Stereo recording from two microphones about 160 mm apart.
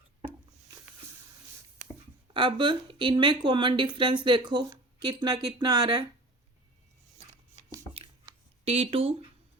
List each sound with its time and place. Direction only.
2.3 s speech: 30° right (ahead or behind)
7.5 s a sound: 25° right (ahead or behind)
8.6 s speech: 40° right (ahead or behind)